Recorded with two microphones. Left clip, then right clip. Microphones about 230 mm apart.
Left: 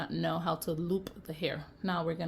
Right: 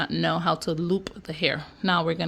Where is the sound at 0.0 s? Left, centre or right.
Right.